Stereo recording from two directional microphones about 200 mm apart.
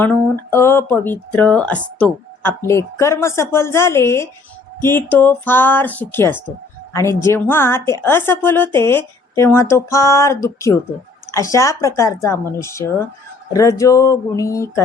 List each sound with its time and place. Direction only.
0.0 s speech: 10° left (ahead or behind)